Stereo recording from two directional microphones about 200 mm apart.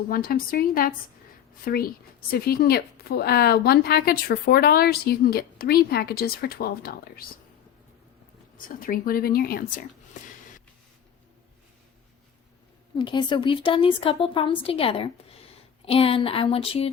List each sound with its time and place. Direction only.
0.1 s a woman's voice: 45° left (ahead or behind)
8.5 s a woman's voice: 45° left (ahead or behind)
13.0 s a woman's voice: 25° left (ahead or behind)